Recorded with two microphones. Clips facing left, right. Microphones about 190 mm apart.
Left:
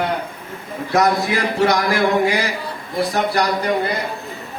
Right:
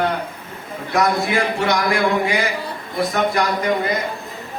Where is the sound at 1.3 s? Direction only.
40° left (ahead or behind).